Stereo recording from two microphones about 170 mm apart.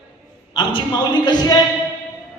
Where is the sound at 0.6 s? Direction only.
25° left (ahead or behind).